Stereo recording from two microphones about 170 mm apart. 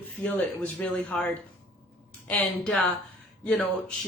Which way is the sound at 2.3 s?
5° left (ahead or behind).